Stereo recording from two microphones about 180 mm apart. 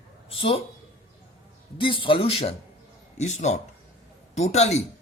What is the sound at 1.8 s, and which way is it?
Speech, 30° left (ahead or behind).